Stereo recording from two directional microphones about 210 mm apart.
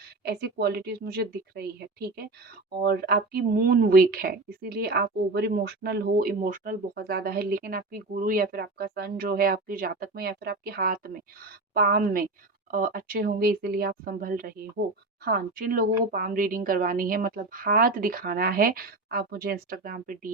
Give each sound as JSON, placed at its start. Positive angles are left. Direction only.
{"t": 0.3, "sound": "speech", "side_deg": -50}